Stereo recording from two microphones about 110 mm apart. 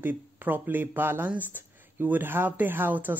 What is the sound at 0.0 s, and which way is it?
Speech, 15° right (ahead or behind).